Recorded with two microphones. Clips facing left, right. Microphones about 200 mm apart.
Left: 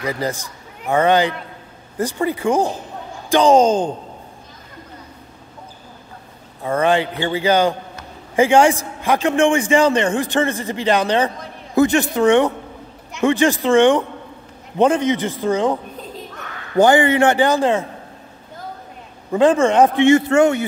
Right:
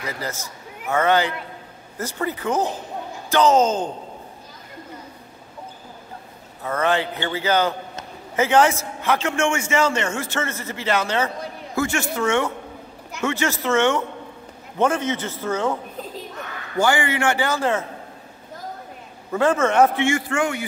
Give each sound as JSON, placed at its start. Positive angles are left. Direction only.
{"t": 0.0, "sound": "speech", "side_deg": 15}
{"t": 6.8, "sound": "speech", "side_deg": 15}
{"t": 16.8, "sound": "a man's voice", "side_deg": 20}
{"t": 19.3, "sound": "a man's voice", "side_deg": 15}